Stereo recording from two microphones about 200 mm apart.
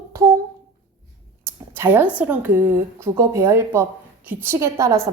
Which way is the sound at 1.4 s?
10° right (ahead or behind).